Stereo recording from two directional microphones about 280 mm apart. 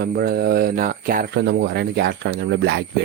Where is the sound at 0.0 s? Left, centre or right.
Right.